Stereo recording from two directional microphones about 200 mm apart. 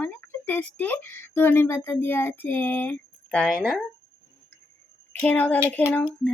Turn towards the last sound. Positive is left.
turn(degrees=10)  # may be behind; listen again after turning